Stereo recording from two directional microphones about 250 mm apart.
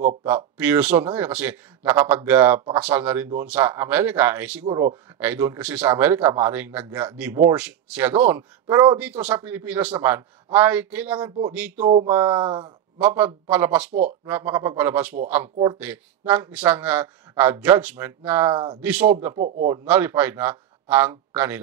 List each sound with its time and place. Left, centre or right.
0.6 s speech: centre
11.8 s speech: right
12.1 s speech: centre
13.0 s speech: centre
18.5 s speech: centre
18.8 s speech: centre
19.3 s a man's voice: right
19.7 s speech: centre